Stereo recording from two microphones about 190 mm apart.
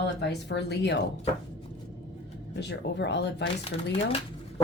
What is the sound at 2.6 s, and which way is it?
Speech, 60° left (ahead or behind).